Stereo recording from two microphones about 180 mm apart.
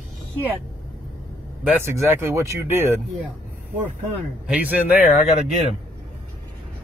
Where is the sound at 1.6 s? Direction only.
15° right (ahead or behind).